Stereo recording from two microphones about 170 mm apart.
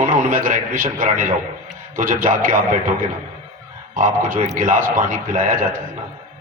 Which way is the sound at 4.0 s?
50° right (ahead or behind).